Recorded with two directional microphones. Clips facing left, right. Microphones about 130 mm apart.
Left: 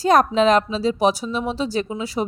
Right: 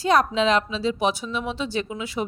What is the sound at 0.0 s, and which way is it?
Speech, 45° left (ahead or behind).